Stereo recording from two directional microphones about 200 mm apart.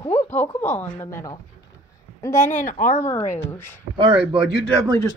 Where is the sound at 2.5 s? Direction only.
40° left (ahead or behind).